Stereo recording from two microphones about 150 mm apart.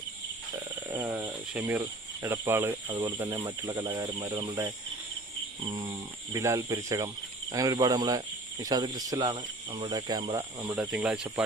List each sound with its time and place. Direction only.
0.9 s speech: 15° right (ahead or behind)
1.8 s cricket: 20° right (ahead or behind)
3.0 s speech: 15° right (ahead or behind)
5.6 s a sound: 40° right (ahead or behind)
6.3 s speech: 20° right (ahead or behind)
10.8 s speech: 5° right (ahead or behind)